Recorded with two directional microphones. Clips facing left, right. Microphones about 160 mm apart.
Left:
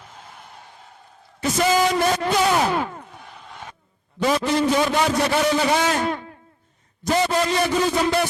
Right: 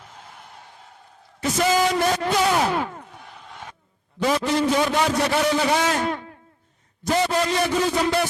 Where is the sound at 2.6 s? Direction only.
20° left (ahead or behind).